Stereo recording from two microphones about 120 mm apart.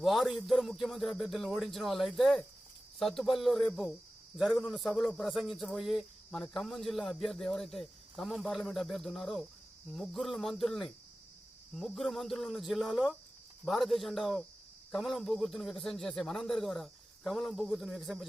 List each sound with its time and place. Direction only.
0.0 s a man's voice: centre (ahead or behind)